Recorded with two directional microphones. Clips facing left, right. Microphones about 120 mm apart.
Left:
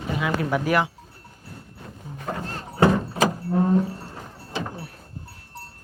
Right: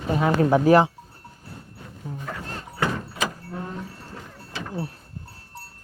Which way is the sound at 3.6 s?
35° left (ahead or behind).